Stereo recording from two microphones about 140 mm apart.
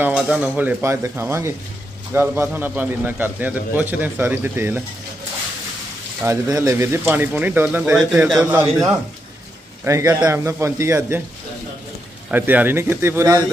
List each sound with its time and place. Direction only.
0.0 s a man's voice: 10° right (ahead or behind)
6.2 s a man's voice: 20° right (ahead or behind)
9.8 s a man's voice: 20° right (ahead or behind)
12.3 s a man's voice: 10° right (ahead or behind)